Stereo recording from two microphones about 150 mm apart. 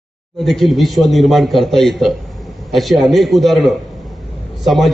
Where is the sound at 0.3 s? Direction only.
Centre (ahead or behind).